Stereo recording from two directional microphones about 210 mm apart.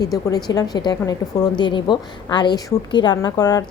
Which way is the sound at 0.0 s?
15° left (ahead or behind).